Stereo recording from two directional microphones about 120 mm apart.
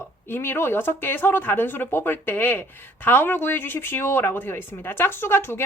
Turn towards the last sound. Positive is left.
turn(degrees=20)  # may be behind; listen again after turning